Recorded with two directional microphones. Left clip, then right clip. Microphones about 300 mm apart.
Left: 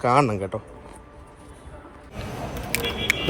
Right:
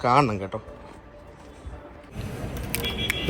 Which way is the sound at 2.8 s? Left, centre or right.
Centre.